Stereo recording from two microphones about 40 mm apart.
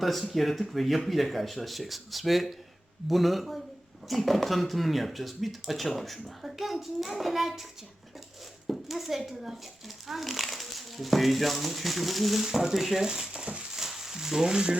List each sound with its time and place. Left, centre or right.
0.0 s speech: centre
8.7 s speech: centre
13.7 s a sound: centre